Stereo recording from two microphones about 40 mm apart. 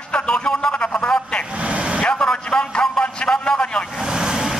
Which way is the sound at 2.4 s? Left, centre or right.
Left.